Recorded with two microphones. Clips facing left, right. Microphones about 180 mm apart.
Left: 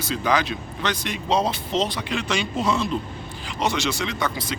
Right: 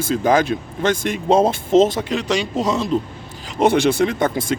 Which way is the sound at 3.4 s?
55° right (ahead or behind).